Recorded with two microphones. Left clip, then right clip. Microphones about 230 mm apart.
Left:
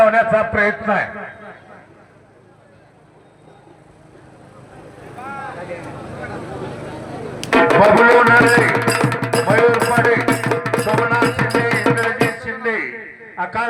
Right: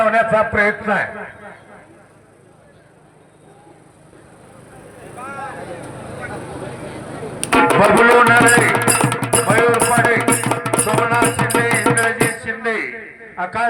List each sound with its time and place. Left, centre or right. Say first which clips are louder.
0.0 s a man's voice: left 1 dB; right
7.4 s music: left 1 dB; right
12.2 s a sound: even; right